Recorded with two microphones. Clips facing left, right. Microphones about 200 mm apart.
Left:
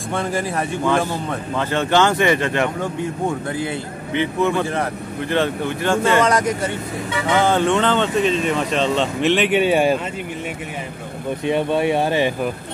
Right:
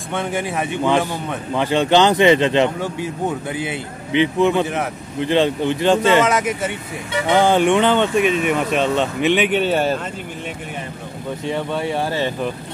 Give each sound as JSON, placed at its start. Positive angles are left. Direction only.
{"t": 0.1, "sound": "speech", "side_deg": 0}
{"t": 1.5, "sound": "speech", "side_deg": -15}
{"t": 4.1, "sound": "speech", "side_deg": -20}
{"t": 6.2, "sound": "speech", "side_deg": -5}
{"t": 7.2, "sound": "speech", "side_deg": -15}
{"t": 9.6, "sound": "speech", "side_deg": 10}
{"t": 11.4, "sound": "speech", "side_deg": 20}